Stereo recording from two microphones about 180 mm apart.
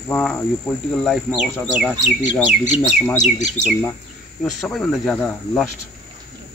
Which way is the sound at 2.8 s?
15° left (ahead or behind).